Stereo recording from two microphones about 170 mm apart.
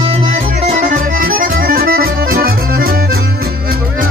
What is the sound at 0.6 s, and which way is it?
Accordion, 45° right (ahead or behind).